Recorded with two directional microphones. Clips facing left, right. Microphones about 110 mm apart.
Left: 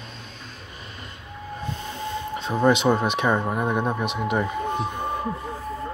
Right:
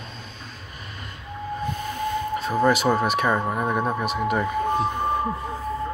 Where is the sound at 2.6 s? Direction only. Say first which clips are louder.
Left 2 dB; 20° left (ahead or behind).